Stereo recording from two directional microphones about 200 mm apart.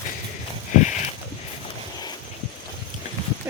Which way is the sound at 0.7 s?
35° left (ahead or behind).